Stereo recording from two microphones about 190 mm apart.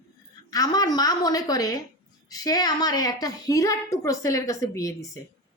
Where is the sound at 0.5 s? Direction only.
20° left (ahead or behind).